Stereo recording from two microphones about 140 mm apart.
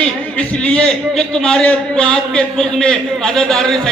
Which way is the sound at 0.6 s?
5° left (ahead or behind).